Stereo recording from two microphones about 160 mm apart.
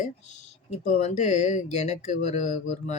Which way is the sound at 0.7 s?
45° left (ahead or behind).